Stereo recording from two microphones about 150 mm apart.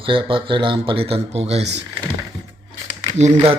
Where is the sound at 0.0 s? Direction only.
35° right (ahead or behind).